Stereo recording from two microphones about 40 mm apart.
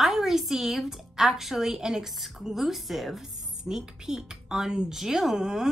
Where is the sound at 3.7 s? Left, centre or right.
Centre.